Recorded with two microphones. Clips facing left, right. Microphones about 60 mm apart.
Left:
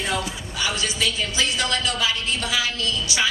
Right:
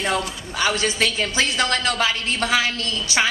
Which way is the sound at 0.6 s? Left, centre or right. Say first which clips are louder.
Right 4 dB; right.